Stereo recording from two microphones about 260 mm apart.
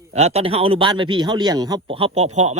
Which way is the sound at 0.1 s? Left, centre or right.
Right.